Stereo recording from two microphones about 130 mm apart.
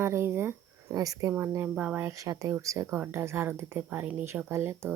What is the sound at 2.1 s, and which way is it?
A woman's voice, 25° right (ahead or behind).